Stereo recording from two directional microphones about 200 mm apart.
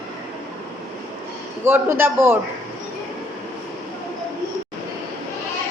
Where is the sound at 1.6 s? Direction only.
10° right (ahead or behind).